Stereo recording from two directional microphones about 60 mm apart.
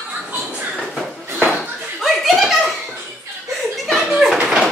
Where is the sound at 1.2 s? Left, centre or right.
Right.